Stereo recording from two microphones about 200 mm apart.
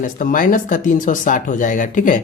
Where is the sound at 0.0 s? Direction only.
40° left (ahead or behind).